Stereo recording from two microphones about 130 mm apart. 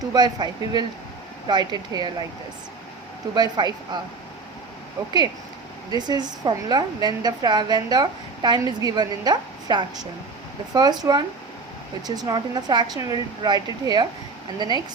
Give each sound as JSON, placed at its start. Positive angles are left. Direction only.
{"t": 0.1, "sound": "a woman's voice", "side_deg": -35}
{"t": 3.3, "sound": "a woman's voice", "side_deg": -35}
{"t": 6.0, "sound": "a woman's voice", "side_deg": -35}